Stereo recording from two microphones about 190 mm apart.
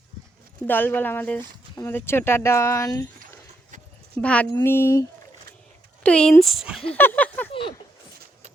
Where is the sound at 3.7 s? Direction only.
40° right (ahead or behind).